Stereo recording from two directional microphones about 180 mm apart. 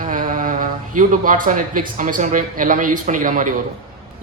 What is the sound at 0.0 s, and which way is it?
Speech, 50° right (ahead or behind).